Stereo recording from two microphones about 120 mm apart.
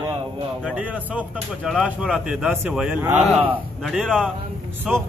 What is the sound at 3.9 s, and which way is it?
Speech, 5° left (ahead or behind).